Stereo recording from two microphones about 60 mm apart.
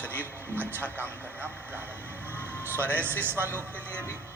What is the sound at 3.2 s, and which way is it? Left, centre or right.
Speech, right.